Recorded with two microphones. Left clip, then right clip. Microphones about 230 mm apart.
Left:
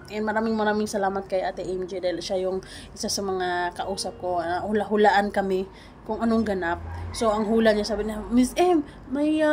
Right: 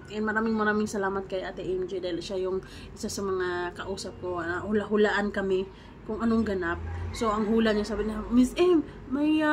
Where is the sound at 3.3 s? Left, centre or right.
Centre.